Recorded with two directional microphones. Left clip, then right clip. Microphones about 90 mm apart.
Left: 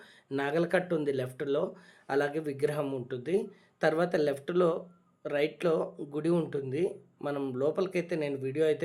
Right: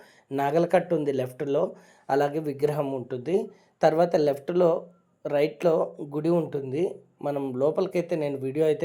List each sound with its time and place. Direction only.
0.3 s speech: 30° right (ahead or behind)
6.3 s speech: 15° right (ahead or behind)
6.6 s speech: 25° right (ahead or behind)
7.2 s speech: 10° right (ahead or behind)
7.5 s speech: 25° right (ahead or behind)